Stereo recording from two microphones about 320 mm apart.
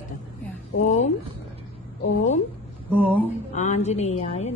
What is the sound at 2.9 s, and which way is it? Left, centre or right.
Speech, centre.